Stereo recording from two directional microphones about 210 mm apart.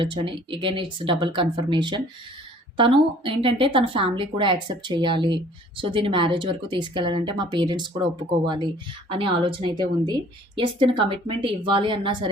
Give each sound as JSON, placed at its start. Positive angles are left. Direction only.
{"t": 0.0, "sound": "a woman's voice", "side_deg": -25}